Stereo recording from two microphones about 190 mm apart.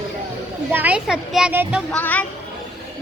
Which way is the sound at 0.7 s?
10° right (ahead or behind).